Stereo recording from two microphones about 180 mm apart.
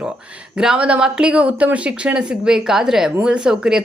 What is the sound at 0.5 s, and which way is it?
Speech, 5° right (ahead or behind).